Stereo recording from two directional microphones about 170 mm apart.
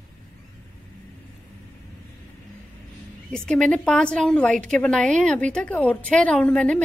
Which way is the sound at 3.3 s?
5° left (ahead or behind).